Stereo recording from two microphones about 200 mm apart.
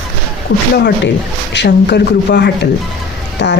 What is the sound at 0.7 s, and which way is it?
Speech, 55° left (ahead or behind).